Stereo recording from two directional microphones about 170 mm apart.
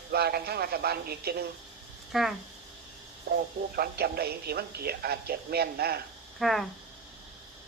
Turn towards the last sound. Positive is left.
turn(degrees=0)  # may be behind; listen again after turning